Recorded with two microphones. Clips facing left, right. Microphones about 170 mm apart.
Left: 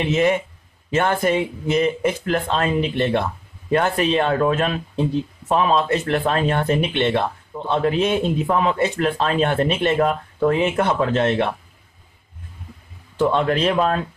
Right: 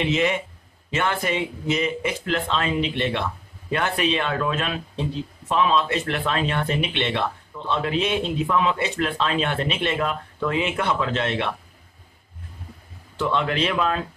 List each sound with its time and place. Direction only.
0.0 s speech: 45° left (ahead or behind)
13.2 s speech: 40° left (ahead or behind)